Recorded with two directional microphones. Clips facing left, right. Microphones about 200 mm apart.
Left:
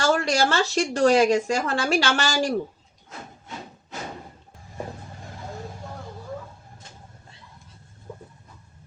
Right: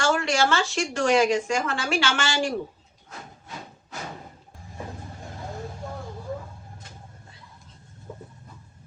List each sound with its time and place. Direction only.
0.0 s speech: 35° left (ahead or behind)